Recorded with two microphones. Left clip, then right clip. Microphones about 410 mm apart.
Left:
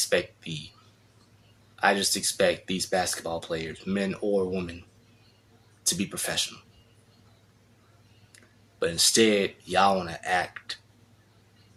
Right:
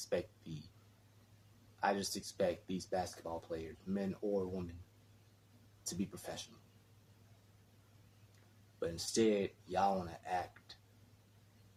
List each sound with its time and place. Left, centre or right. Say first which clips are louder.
0.1 s speech: left 13 dB; right
1.8 s speech: left 13 dB; right
5.8 s speech: left 15 dB; right
8.8 s speech: left 13 dB; right